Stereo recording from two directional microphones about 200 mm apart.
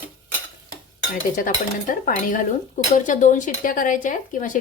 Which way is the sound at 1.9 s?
40° left (ahead or behind).